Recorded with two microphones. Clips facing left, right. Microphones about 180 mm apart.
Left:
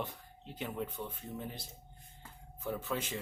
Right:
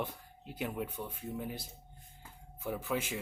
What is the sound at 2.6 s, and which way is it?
Speech, 10° right (ahead or behind).